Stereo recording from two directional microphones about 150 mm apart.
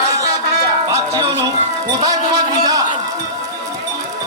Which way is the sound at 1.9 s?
25° right (ahead or behind).